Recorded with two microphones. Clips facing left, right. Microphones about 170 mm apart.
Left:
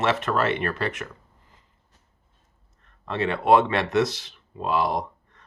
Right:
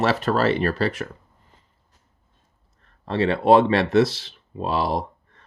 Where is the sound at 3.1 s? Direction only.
30° right (ahead or behind).